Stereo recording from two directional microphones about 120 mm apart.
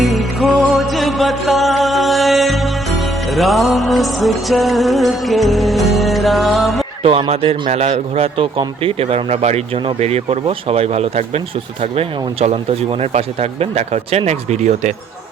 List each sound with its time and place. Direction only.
0.0 s music: centre (ahead or behind)
7.0 s speech: 50° right (ahead or behind); by 14.9 s 80° right